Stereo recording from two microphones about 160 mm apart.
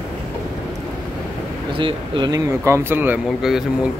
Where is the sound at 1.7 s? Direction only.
30° right (ahead or behind).